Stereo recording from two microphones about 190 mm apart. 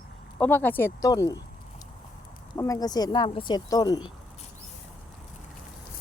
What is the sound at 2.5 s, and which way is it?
Speech, 20° left (ahead or behind).